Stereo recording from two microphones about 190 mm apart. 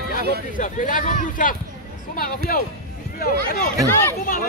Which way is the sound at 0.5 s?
45° left (ahead or behind).